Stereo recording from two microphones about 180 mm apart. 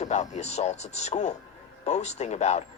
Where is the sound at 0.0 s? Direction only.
40° left (ahead or behind).